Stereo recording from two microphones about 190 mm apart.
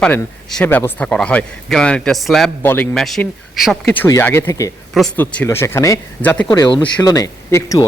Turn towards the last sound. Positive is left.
turn(degrees=20)  # may be behind; listen again after turning